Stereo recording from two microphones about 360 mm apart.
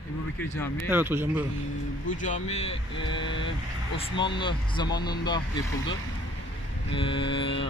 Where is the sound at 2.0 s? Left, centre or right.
Left.